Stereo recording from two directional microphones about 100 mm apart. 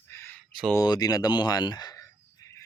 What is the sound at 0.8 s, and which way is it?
Speech, 40° left (ahead or behind).